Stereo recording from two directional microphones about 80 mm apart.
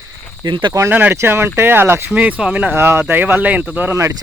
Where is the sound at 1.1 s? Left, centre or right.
Right.